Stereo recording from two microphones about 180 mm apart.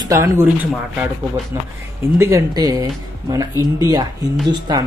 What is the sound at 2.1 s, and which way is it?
Speech, 15° right (ahead or behind).